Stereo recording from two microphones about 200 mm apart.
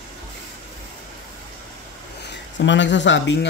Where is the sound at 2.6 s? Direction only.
65° left (ahead or behind).